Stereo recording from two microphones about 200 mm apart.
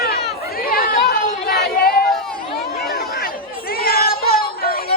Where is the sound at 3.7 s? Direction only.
50° left (ahead or behind).